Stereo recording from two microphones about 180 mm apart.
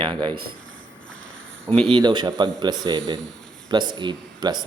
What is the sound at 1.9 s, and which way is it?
Speech, 25° right (ahead or behind).